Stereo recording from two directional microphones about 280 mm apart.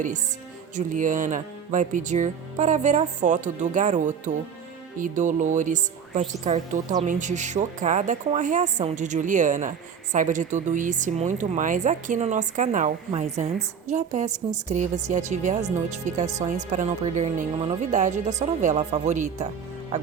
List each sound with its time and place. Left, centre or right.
0.8 s speech: right